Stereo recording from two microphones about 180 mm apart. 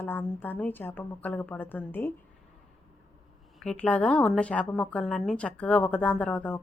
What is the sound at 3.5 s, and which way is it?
Speech, 5° left (ahead or behind).